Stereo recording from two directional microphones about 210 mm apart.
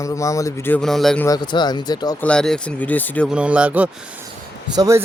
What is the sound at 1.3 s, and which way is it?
Speech, 20° left (ahead or behind).